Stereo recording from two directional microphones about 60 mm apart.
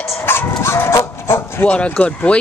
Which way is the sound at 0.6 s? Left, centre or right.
Left.